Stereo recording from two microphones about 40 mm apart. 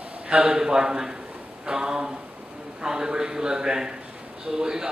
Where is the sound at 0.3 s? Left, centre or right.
Right.